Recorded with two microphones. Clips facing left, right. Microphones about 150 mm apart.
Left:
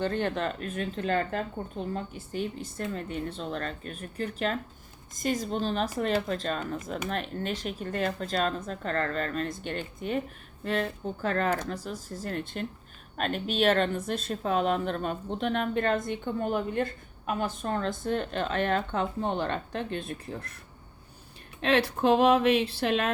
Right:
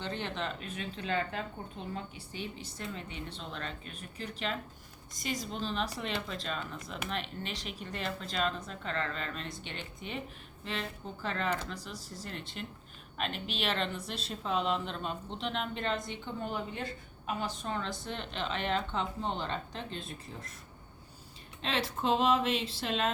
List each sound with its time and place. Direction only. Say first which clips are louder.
0.0 s speech: left 8 dB; 50° left (ahead or behind)
21.6 s speech: left 9 dB; 60° left (ahead or behind)